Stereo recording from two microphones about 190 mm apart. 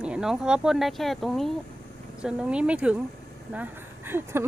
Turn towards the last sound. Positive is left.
turn(degrees=-10)  # may be behind; listen again after turning